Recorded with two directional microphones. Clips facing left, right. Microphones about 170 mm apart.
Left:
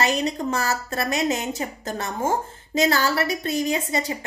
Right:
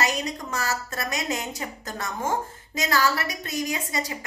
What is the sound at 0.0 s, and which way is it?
A woman's voice, 30° left (ahead or behind).